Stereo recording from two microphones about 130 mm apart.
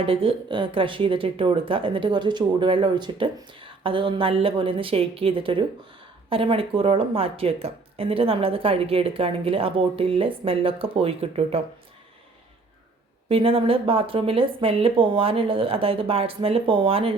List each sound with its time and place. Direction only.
0.0 s a woman's voice: 45° right (ahead or behind)
13.2 s a woman's voice: 45° right (ahead or behind)